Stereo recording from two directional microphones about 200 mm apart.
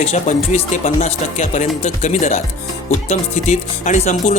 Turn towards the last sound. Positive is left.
turn(degrees=35)  # may be behind; listen again after turning